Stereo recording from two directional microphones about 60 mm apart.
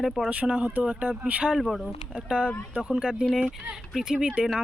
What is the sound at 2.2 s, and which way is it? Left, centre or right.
Speech, centre.